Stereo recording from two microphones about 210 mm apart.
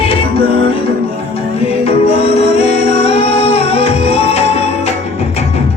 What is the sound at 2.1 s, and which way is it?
Music, 30° left (ahead or behind).